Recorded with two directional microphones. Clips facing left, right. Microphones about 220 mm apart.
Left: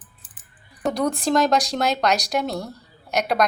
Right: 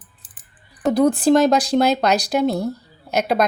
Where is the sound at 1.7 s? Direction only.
15° right (ahead or behind).